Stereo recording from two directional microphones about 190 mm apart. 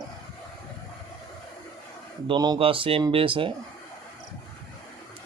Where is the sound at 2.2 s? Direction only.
25° right (ahead or behind).